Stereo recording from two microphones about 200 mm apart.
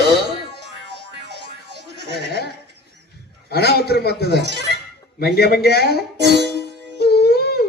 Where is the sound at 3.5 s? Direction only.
55° left (ahead or behind).